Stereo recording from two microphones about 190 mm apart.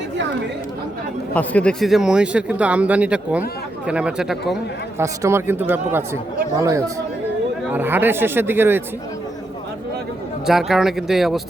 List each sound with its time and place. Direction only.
1.3 s speech: 5° left (ahead or behind)
4.9 s speech: 15° right (ahead or behind)
10.4 s speech: centre (ahead or behind)